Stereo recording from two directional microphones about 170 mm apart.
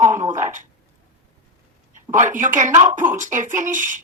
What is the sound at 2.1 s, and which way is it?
A woman's voice, 50° right (ahead or behind).